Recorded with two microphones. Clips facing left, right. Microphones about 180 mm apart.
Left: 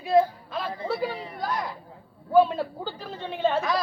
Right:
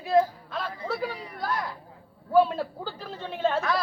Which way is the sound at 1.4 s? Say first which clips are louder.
Even; 15° left (ahead or behind).